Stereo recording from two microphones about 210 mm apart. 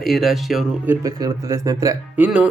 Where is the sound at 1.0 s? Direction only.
15° right (ahead or behind).